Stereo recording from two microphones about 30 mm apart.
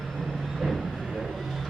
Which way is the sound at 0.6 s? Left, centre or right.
Centre.